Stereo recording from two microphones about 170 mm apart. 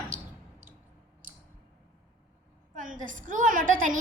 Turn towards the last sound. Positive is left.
turn(degrees=-50)  # may be behind; listen again after turning